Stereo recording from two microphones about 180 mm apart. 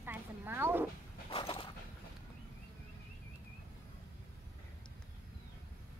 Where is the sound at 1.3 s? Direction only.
30° left (ahead or behind).